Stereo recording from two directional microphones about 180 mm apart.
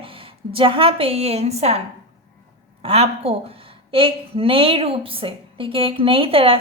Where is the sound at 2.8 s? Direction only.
35° right (ahead or behind).